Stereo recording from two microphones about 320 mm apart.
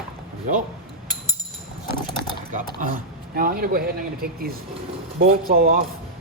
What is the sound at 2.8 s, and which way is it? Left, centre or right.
A man's voice, right.